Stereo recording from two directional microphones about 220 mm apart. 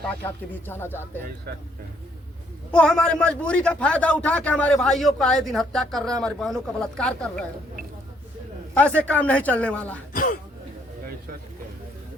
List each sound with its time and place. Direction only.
0.3 s speech: 10° left (ahead or behind)
2.7 s a man's voice: 5° left (ahead or behind)
8.8 s speech: 5° left (ahead or behind)
10.1 s throat clearing: 40° left (ahead or behind)